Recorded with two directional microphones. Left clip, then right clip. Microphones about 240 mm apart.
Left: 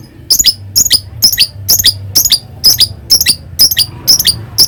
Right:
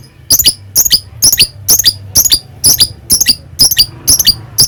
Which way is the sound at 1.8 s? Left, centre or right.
Centre.